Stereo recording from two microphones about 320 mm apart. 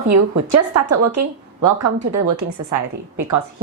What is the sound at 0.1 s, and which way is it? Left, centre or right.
A woman's voice, right.